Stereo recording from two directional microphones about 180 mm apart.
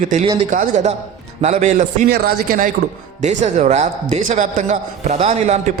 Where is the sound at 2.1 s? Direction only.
60° right (ahead or behind).